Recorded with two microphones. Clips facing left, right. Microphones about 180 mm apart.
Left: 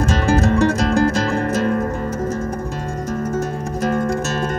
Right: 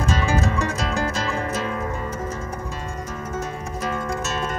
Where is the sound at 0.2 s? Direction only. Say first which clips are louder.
Left 7 dB; 55° left (ahead or behind).